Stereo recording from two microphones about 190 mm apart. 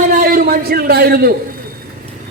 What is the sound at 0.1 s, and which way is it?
A man's voice, 50° right (ahead or behind).